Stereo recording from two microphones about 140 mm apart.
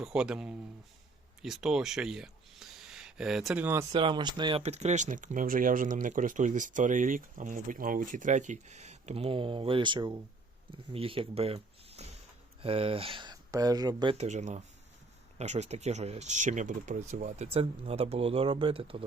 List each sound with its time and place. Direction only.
0.0 s speech: 5° right (ahead or behind)
3.6 s speech: 15° right (ahead or behind)
3.9 s speech: 35° right (ahead or behind)
4.6 s speech: 50° right (ahead or behind); by 14.2 s 30° right (ahead or behind)
14.2 s speech: 55° right (ahead or behind)